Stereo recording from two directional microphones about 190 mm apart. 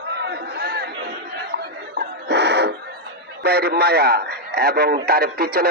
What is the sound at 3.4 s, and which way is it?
A man's voice, 55° right (ahead or behind).